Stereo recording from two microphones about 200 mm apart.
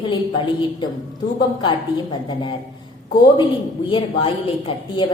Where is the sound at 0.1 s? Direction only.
25° left (ahead or behind).